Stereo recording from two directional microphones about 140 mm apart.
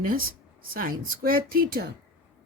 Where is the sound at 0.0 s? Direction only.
90° right.